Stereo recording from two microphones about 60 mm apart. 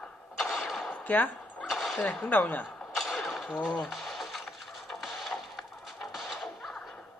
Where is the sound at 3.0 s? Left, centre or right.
Centre.